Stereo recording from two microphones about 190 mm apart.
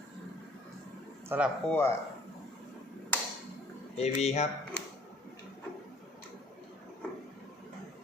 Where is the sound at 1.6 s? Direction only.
10° left (ahead or behind).